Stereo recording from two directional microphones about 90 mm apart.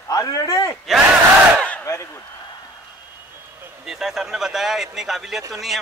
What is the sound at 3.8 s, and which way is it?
Speech, 5° right (ahead or behind).